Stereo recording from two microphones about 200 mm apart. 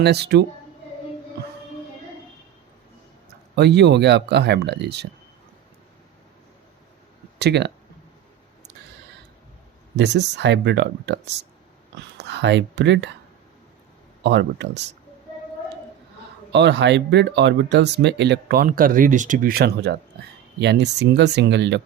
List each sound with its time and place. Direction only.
0.0 s speech: 55° right (ahead or behind)
3.5 s speech: 60° right (ahead or behind)
7.3 s speech: 55° right (ahead or behind)
9.9 s speech: 60° right (ahead or behind)
14.3 s speech: 60° right (ahead or behind)
16.5 s speech: 60° right (ahead or behind)